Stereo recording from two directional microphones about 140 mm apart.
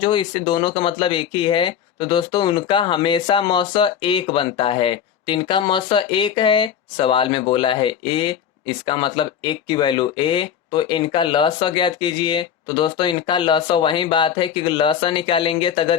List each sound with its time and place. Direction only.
0.0 s speech: 35° left (ahead or behind)